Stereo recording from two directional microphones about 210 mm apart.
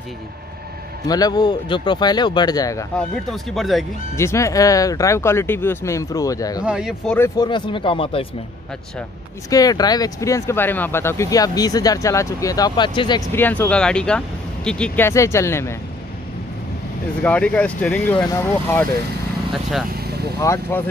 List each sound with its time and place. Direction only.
1.0 s speech: 20° left (ahead or behind)
3.0 s speech: centre (ahead or behind)
4.2 s speech: 15° left (ahead or behind)
6.6 s speech: 5° right (ahead or behind)
7.2 s speech: 20° left (ahead or behind)
9.5 s speech: 15° left (ahead or behind)
13.3 s speech: 10° left (ahead or behind)
17.2 s speech: 5° left (ahead or behind)
20.0 s vehicle: 50° right (ahead or behind)
20.3 s speech: 15° left (ahead or behind)